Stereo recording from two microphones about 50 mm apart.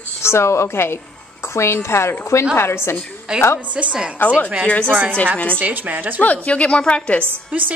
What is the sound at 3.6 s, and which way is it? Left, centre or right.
Speech, right.